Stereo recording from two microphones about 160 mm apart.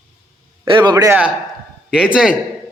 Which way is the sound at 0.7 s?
30° right (ahead or behind).